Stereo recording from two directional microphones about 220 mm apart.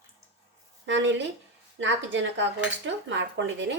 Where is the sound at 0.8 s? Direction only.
55° right (ahead or behind).